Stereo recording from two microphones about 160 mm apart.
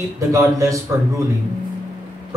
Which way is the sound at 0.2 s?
20° right (ahead or behind).